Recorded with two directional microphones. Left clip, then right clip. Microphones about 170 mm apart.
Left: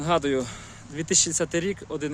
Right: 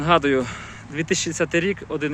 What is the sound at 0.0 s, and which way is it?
Speech, 10° left (ahead or behind).